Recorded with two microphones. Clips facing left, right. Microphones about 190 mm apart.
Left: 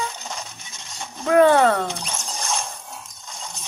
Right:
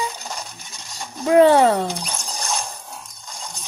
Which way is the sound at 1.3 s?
15° right (ahead or behind).